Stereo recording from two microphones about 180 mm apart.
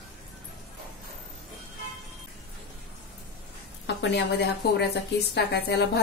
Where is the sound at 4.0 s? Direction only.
70° left (ahead or behind).